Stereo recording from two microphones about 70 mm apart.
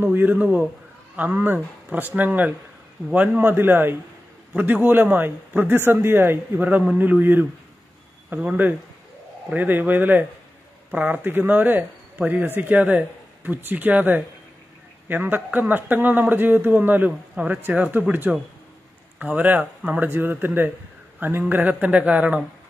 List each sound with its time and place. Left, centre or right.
0.0 s speech: right
9.5 s speech: right
20.1 s speech: right